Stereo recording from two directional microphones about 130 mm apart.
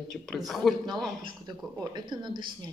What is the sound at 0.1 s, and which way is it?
Speech, 5° left (ahead or behind).